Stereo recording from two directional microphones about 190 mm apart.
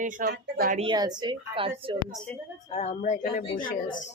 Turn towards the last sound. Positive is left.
turn(degrees=45)  # may be behind; listen again after turning